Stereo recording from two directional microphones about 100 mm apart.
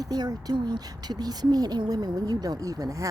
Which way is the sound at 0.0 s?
40° right (ahead or behind).